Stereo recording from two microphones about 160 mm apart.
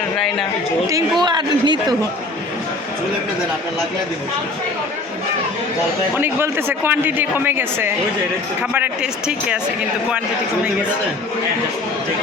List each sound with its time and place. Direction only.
1.2 s a man's voice: 30° right (ahead or behind)
6.1 s speech: 15° right (ahead or behind)